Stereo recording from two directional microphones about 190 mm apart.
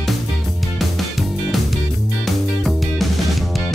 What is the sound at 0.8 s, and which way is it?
Music, centre (ahead or behind).